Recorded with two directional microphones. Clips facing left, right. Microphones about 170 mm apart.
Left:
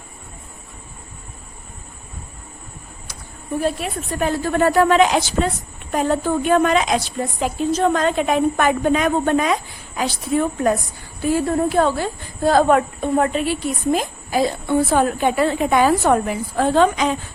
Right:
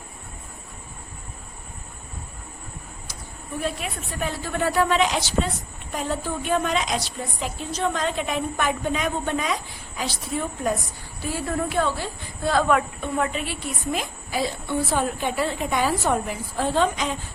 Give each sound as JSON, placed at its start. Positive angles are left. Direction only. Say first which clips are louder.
{"t": 3.5, "sound": "a woman's voice", "louder": "left 7 dB", "side_deg": 40}
{"t": 11.4, "sound": "a woman's voice", "louder": "left 4 dB", "side_deg": 35}